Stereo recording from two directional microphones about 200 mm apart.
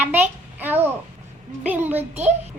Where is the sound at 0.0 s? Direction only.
10° right (ahead or behind).